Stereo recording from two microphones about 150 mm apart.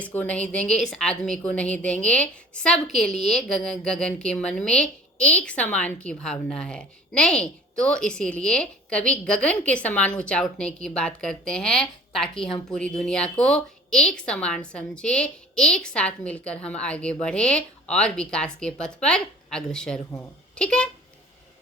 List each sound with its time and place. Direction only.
0.0 s a woman's voice: 10° left (ahead or behind)